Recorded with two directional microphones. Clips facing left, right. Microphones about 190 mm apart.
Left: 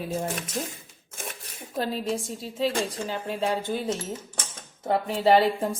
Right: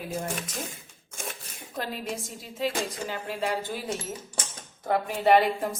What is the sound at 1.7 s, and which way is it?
Speech, 30° left (ahead or behind).